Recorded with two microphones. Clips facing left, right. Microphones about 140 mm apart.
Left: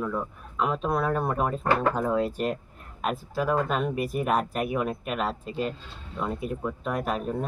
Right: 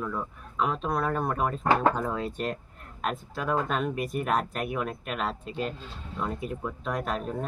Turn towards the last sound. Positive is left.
turn(degrees=5)  # may be behind; listen again after turning